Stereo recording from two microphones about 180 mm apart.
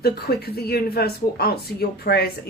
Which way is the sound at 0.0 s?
60° left (ahead or behind).